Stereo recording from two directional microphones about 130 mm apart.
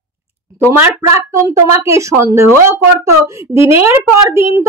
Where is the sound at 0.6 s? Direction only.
20° right (ahead or behind).